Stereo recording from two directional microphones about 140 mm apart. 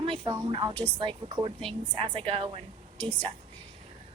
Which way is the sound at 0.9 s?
35° right (ahead or behind).